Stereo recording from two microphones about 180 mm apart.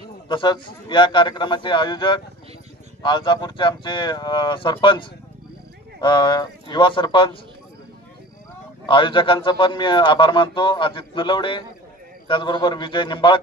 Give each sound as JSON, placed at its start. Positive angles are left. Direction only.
{"t": 0.3, "sound": "a man's voice", "side_deg": 25}
{"t": 5.9, "sound": "a man's voice", "side_deg": 25}
{"t": 8.8, "sound": "a man's voice", "side_deg": 25}